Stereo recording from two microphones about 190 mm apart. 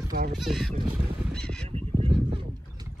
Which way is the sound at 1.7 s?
30° right (ahead or behind).